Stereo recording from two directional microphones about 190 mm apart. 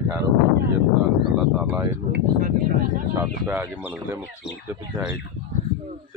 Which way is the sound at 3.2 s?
10° right (ahead or behind).